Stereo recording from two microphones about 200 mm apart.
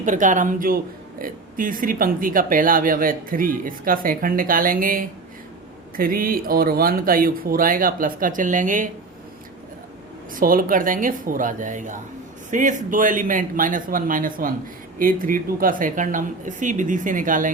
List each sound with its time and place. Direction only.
0.0 s speech: 40° right (ahead or behind)
10.3 s speech: 45° right (ahead or behind)